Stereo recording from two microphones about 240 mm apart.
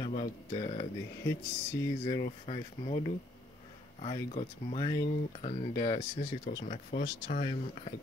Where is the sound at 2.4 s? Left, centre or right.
Left.